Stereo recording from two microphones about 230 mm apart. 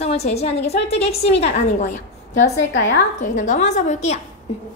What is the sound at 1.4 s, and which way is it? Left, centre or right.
Speech, left.